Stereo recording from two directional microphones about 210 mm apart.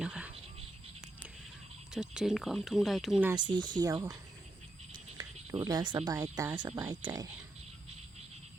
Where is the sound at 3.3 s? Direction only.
20° right (ahead or behind).